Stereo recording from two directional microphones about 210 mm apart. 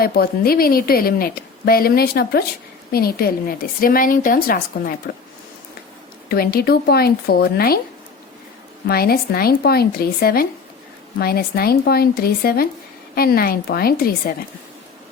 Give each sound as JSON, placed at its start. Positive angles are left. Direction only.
{"t": 0.0, "sound": "a woman's voice", "side_deg": 45}
{"t": 6.2, "sound": "a woman's voice", "side_deg": 45}
{"t": 8.9, "sound": "a woman's voice", "side_deg": 45}